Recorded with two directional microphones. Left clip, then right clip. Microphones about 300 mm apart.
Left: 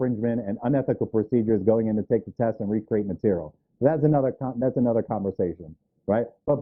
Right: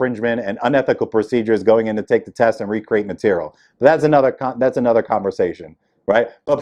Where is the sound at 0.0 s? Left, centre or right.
Centre.